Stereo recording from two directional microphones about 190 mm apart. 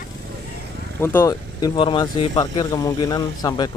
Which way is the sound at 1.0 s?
15° left (ahead or behind).